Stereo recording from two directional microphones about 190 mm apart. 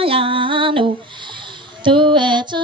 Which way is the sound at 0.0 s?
30° right (ahead or behind).